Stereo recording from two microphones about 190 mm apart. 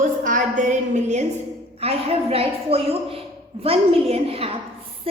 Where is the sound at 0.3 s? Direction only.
45° right (ahead or behind).